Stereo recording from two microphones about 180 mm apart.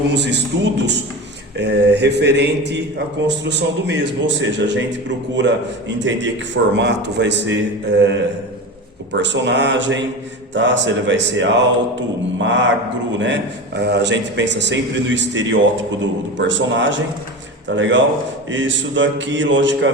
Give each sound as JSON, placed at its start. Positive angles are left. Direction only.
{"t": 0.1, "sound": "a man's voice", "side_deg": -70}
{"t": 6.0, "sound": "a man's voice", "side_deg": -90}
{"t": 10.5, "sound": "mantra", "side_deg": -90}
{"t": 13.7, "sound": "a man's voice", "side_deg": -75}
{"t": 16.4, "sound": "mantra", "side_deg": -90}